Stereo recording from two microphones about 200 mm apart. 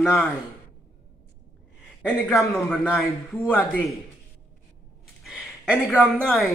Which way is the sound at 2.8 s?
10° left (ahead or behind).